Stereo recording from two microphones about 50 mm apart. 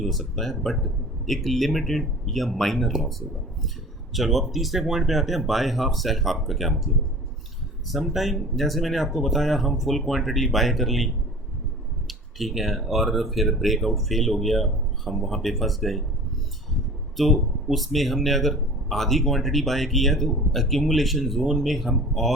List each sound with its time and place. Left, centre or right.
0.0 s speech: centre
7.9 s speech: centre
17.3 s speech: centre